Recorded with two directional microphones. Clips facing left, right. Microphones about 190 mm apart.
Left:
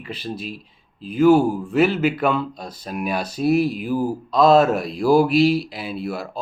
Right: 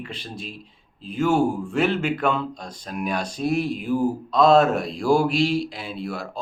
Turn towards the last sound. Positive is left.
turn(degrees=5)  # may be behind; listen again after turning